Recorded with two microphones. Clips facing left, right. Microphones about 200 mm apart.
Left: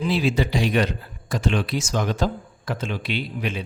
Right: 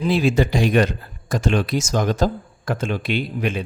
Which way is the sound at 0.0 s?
45° right (ahead or behind).